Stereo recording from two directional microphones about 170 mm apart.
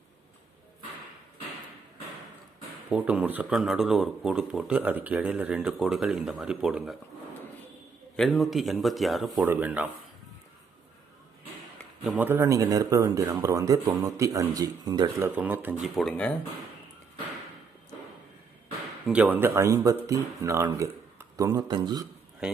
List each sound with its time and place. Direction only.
2.9 s speech: 5° right (ahead or behind)
8.1 s speech: centre (ahead or behind)
12.0 s speech: 10° right (ahead or behind); by 15.3 s 25° right (ahead or behind)
15.4 s speech: 10° right (ahead or behind)
16.0 s speech: 5° left (ahead or behind)
19.0 s speech: 10° right (ahead or behind); by 22.0 s 25° right (ahead or behind)